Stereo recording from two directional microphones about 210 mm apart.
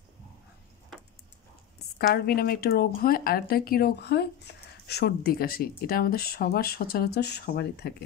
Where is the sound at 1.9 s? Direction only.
45° left (ahead or behind).